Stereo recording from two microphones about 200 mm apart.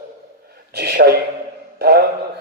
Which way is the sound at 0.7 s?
55° right (ahead or behind).